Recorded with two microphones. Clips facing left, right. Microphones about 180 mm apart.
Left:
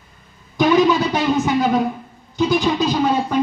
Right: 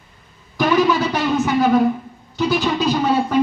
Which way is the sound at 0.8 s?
20° left (ahead or behind).